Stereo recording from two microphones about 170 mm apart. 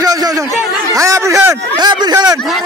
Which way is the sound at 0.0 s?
20° right (ahead or behind).